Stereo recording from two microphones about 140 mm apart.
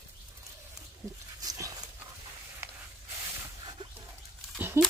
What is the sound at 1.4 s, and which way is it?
Dog, 25° right (ahead or behind).